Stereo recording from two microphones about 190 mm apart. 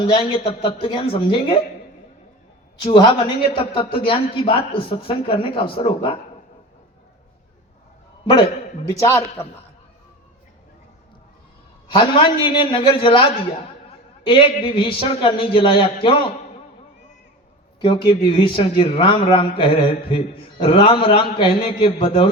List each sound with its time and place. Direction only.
0.0 s a man's voice: 30° left (ahead or behind)
2.8 s a man's voice: 25° left (ahead or behind)
9.0 s a man's voice: 15° left (ahead or behind)
11.9 s a man's voice: 25° left (ahead or behind)
17.7 s a man's voice: 25° left (ahead or behind)